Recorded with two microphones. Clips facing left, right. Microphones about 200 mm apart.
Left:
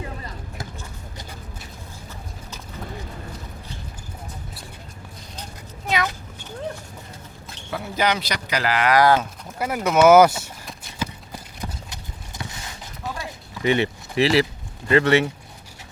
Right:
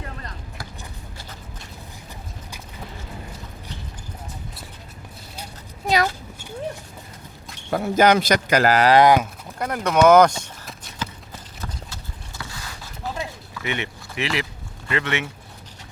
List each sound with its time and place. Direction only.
7.7 s a man's voice: 45° right (ahead or behind)
9.0 s speech: 15° right (ahead or behind)
9.6 s clip-clop: 5° left (ahead or behind)
12.4 s a sound: 20° left (ahead or behind)
13.6 s speech: 35° left (ahead or behind)